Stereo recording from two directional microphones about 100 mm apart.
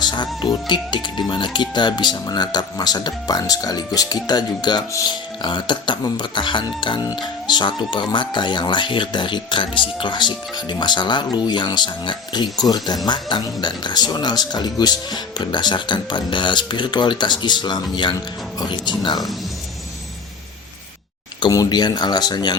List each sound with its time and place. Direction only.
0.0 s music: 45° left (ahead or behind)
0.7 s speech: 50° left (ahead or behind)
21.5 s speech: 40° left (ahead or behind)